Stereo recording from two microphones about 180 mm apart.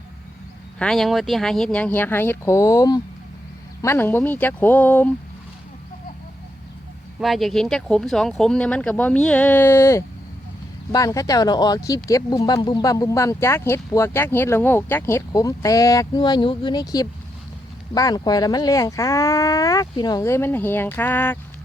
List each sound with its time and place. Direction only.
0.8 s speech: centre (ahead or behind)
7.2 s speech: centre (ahead or behind)